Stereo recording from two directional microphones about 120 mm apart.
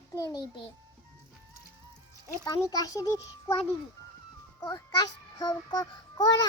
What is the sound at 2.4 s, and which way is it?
A child's voice, 35° left (ahead or behind).